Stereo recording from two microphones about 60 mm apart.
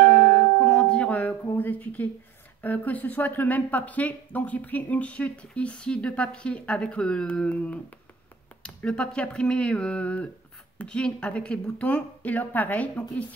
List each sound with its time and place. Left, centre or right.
0.0 s music: left
1.6 s speech: left